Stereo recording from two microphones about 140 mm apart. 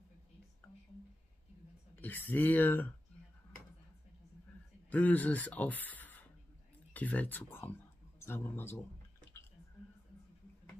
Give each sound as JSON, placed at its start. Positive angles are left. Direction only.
{"t": 2.0, "sound": "speech", "side_deg": 15}
{"t": 4.8, "sound": "speech", "side_deg": 10}